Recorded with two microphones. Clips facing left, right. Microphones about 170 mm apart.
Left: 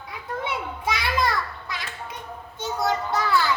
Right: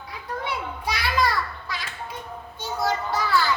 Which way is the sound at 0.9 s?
20° left (ahead or behind).